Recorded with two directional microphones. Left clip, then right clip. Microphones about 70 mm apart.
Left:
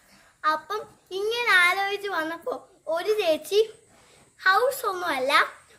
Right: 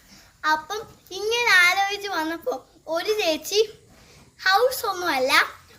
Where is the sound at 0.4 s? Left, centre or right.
Left.